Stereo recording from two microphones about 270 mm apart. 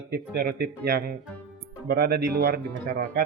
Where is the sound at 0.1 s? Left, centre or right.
Right.